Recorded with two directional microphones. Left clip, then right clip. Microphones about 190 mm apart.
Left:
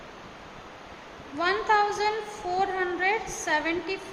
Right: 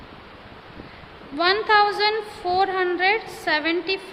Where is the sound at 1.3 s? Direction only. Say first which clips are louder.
Right 6 dB; 20° right (ahead or behind).